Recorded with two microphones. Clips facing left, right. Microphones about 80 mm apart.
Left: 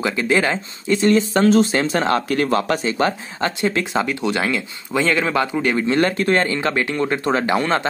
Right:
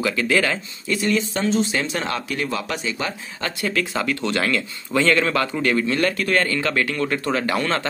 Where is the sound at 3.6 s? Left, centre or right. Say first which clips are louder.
Left 2 dB; left.